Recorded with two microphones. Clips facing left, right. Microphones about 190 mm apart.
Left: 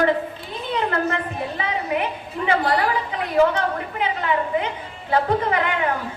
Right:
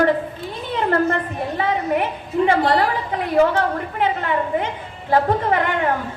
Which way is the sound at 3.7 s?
45° right (ahead or behind).